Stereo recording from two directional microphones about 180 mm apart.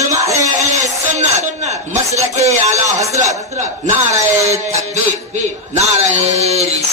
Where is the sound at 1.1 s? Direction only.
40° right (ahead or behind).